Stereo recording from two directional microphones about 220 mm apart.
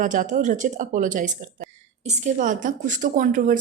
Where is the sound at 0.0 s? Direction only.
35° right (ahead or behind).